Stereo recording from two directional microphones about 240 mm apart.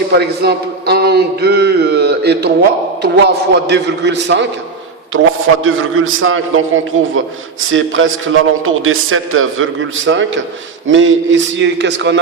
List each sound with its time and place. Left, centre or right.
0.1 s a sound: right
3.0 s a man's voice: right
5.6 s a man's voice: right